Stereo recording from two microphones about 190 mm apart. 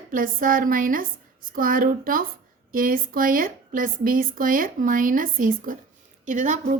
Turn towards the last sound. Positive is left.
turn(degrees=-40)  # may be behind; listen again after turning